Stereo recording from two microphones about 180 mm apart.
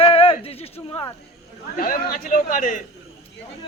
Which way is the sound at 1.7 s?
50° left (ahead or behind).